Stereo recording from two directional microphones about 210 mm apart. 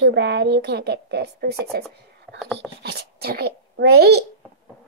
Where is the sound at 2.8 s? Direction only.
50° right (ahead or behind).